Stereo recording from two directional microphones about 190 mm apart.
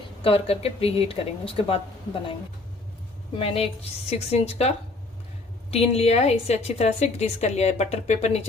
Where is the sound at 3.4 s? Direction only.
30° left (ahead or behind).